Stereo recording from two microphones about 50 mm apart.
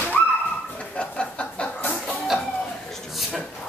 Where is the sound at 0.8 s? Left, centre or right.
Left.